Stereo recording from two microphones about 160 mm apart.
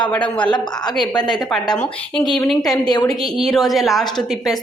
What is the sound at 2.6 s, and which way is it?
Speech, 25° left (ahead or behind).